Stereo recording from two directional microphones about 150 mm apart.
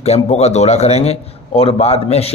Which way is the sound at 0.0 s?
45° left (ahead or behind).